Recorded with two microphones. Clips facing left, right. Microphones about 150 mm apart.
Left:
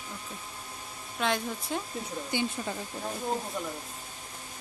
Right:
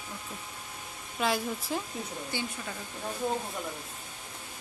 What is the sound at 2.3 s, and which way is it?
Speech, 20° left (ahead or behind).